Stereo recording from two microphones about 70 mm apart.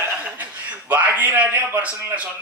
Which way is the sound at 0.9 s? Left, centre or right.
Right.